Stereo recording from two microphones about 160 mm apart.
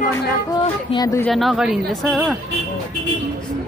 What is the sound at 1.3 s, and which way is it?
A woman's voice, centre (ahead or behind).